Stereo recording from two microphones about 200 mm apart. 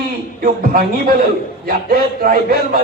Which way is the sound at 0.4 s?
45° right (ahead or behind).